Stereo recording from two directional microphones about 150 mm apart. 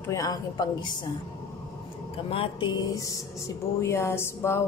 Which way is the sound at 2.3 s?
35° left (ahead or behind).